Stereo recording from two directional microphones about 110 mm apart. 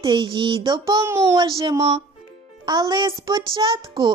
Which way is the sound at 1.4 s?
50° right (ahead or behind).